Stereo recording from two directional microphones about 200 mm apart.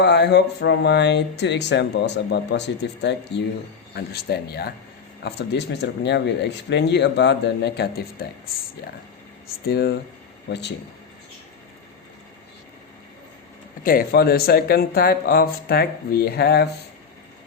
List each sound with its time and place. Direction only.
0.0 s speech: 55° left (ahead or behind)
9.6 s speech: 50° left (ahead or behind)
13.8 s speech: 45° left (ahead or behind)